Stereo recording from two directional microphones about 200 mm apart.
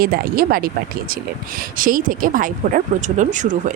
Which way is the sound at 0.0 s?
45° right (ahead or behind).